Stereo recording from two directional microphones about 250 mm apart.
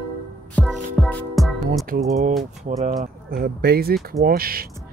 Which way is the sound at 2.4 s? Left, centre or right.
Right.